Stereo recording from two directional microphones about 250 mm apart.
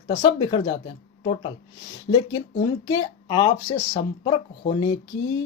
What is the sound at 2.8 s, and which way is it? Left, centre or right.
Speech, centre.